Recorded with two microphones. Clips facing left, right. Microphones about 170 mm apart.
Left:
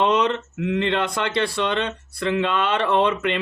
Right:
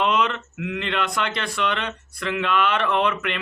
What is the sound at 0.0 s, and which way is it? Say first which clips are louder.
Speech: left 3 dB; 25° left (ahead or behind).